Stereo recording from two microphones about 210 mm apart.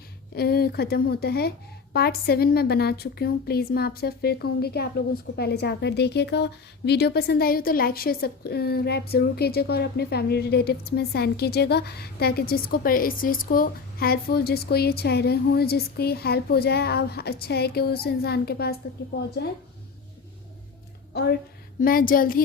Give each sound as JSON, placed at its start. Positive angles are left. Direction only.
{"t": 0.3, "sound": "a woman's voice", "side_deg": 50}
{"t": 21.1, "sound": "a woman's voice", "side_deg": 50}